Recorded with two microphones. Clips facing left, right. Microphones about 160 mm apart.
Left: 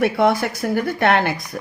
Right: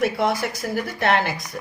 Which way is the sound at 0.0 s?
60° left (ahead or behind).